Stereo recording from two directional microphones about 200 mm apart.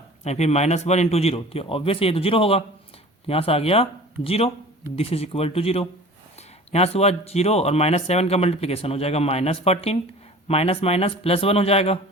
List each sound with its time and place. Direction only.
0.3 s speech: 35° left (ahead or behind)